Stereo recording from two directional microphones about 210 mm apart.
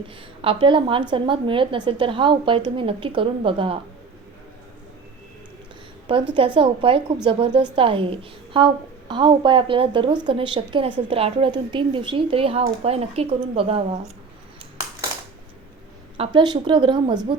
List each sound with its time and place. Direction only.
0.4 s a woman's voice: 25° right (ahead or behind)
6.3 s a woman's voice: 25° right (ahead or behind)
16.1 s a woman's voice: 25° right (ahead or behind)